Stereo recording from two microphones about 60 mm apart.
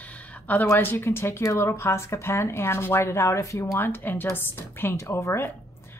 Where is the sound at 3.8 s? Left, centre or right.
Left.